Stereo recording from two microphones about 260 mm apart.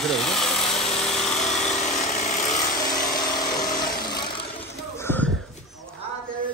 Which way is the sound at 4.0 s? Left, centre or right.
Left.